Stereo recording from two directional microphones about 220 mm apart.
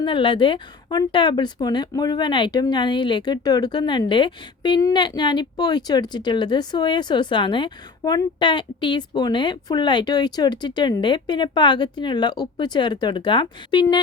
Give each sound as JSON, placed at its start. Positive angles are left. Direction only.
{"t": 0.0, "sound": "speech", "side_deg": 20}